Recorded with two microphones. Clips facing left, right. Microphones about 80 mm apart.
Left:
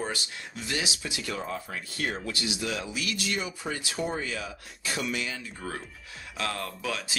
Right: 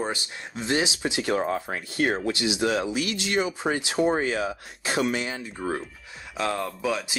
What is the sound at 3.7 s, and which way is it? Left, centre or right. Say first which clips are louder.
Speech: right 7 dB; right.